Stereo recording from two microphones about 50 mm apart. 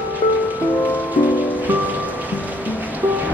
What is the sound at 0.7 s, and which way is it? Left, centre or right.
Music, left.